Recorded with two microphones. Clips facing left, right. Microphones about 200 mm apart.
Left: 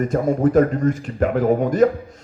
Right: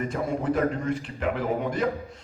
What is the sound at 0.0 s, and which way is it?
A man's voice, 45° left (ahead or behind).